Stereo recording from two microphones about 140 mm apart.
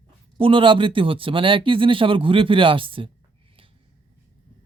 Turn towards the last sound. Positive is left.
turn(degrees=-40)  # may be behind; listen again after turning